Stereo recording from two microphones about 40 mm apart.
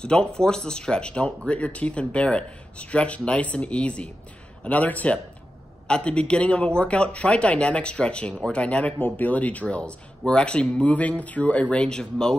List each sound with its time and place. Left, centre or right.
0.0 s speech: left
5.9 s speech: left
9.0 s speech: left; by 12.4 s centre